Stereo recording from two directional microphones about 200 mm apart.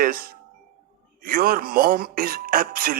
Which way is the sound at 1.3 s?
45° right (ahead or behind).